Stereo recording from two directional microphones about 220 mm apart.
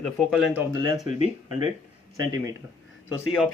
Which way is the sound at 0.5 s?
15° right (ahead or behind).